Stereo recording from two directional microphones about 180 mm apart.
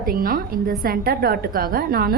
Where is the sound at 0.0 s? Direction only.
50° right (ahead or behind).